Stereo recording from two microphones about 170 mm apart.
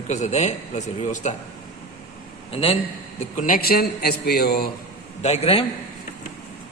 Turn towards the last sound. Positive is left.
turn(degrees=35)  # may be behind; listen again after turning